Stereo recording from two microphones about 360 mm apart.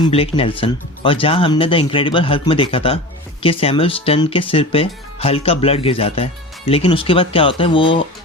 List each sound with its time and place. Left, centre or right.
0.1 s speech: centre